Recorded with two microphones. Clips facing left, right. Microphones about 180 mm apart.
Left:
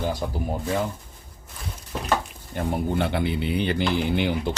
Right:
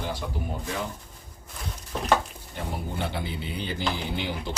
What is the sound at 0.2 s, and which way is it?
Speech, 45° left (ahead or behind).